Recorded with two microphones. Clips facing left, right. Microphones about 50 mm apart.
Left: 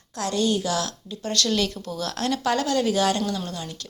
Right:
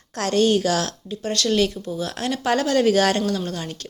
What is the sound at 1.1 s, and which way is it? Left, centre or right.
A woman's voice, right.